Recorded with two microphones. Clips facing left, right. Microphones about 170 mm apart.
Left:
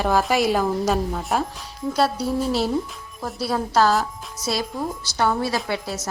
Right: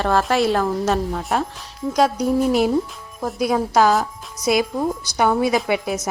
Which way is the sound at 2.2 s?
15° right (ahead or behind).